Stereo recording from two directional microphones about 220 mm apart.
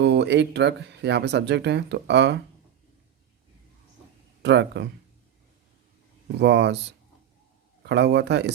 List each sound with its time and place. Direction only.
0.0 s speech: 50° right (ahead or behind)
4.4 s speech: 50° right (ahead or behind)
6.4 s speech: 50° right (ahead or behind)
7.9 s speech: 50° right (ahead or behind)